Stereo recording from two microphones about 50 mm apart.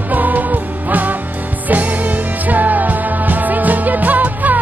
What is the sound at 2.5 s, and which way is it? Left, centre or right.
Music, right.